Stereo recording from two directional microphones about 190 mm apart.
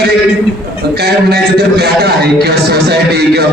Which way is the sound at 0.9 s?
60° right (ahead or behind).